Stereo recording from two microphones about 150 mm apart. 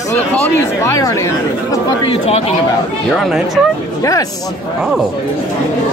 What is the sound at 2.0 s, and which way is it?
Speech, 45° left (ahead or behind).